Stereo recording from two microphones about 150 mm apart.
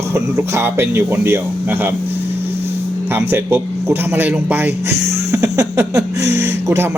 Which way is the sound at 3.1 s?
15° right (ahead or behind).